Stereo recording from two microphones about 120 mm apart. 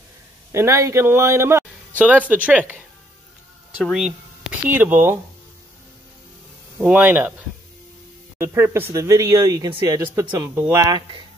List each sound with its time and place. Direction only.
0.5 s a man's voice: 25° right (ahead or behind)
3.8 s speech: centre (ahead or behind)
4.6 s speech: 15° right (ahead or behind)
6.8 s speech: 15° right (ahead or behind)
8.4 s speech: 20° right (ahead or behind)
10.9 s speech: 35° right (ahead or behind)